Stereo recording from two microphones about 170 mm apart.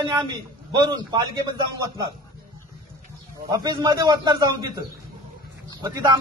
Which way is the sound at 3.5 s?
25° right (ahead or behind).